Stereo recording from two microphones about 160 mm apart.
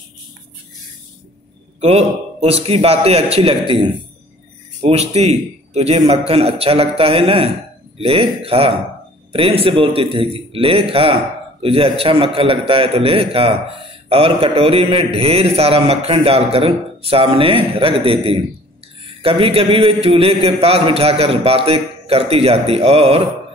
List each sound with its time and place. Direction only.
1.8 s a man's voice: 40° right (ahead or behind)